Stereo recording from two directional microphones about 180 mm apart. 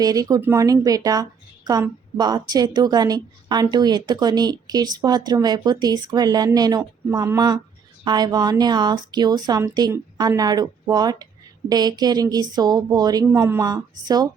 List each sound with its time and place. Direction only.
0.0 s a woman's voice: 20° right (ahead or behind)